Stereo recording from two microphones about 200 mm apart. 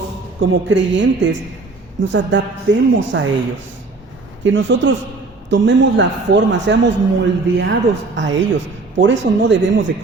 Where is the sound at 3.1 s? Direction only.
65° right (ahead or behind).